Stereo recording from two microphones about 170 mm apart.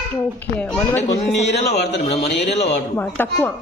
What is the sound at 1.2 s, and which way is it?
A man's voice, 40° left (ahead or behind).